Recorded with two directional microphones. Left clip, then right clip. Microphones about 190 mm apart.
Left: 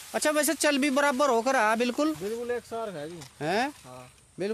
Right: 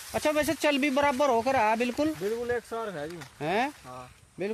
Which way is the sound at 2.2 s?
10° right (ahead or behind).